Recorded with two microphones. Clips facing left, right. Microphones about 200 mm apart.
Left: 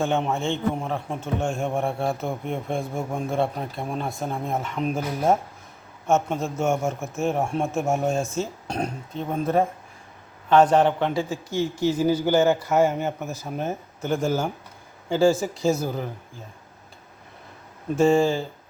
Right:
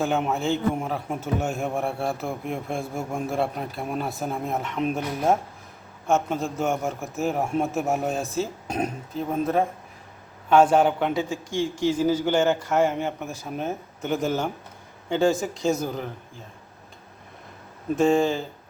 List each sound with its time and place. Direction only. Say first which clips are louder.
0.0 s speech: even; centre (ahead or behind)
17.9 s speech: left 1 dB; centre (ahead or behind)